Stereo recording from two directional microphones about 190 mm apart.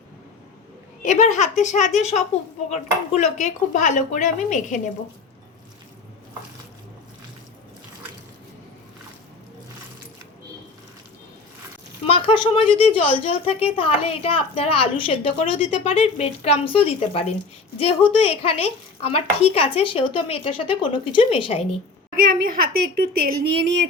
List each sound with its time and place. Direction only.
1.0 s speech: 40° left (ahead or behind)
12.0 s speech: 25° left (ahead or behind)
22.1 s a woman's voice: 50° right (ahead or behind)